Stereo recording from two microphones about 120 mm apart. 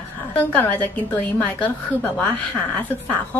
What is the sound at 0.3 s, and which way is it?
A woman's voice, 15° left (ahead or behind).